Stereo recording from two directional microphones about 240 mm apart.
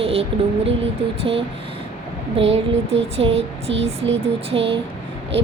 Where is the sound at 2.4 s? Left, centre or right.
Right.